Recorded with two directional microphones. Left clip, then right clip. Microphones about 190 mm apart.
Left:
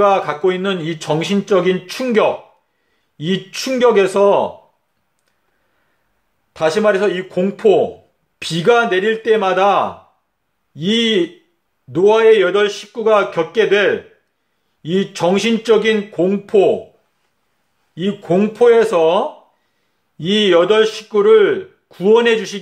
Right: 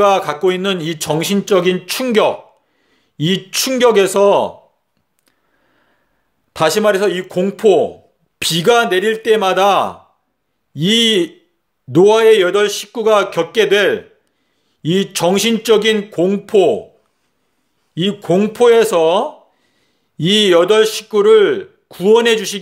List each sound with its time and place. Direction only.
0.0 s a man's voice: 50° right (ahead or behind)
6.5 s a man's voice: 50° right (ahead or behind)
17.9 s a man's voice: 55° right (ahead or behind)